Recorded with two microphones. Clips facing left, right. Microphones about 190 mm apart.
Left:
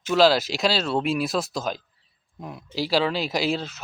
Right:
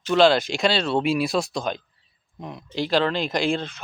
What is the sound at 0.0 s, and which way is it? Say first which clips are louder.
Speech: right 1 dB; 5° left (ahead or behind).